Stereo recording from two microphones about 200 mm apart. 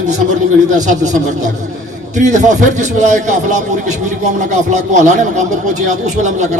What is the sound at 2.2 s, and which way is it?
A man's voice, 35° right (ahead or behind).